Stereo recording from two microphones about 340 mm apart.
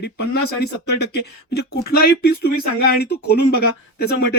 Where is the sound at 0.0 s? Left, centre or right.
Left.